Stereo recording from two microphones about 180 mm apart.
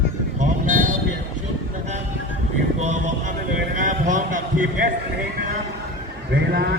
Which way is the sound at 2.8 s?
40° right (ahead or behind).